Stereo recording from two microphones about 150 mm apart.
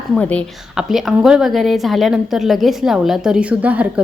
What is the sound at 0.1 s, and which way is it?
Speech, 10° left (ahead or behind).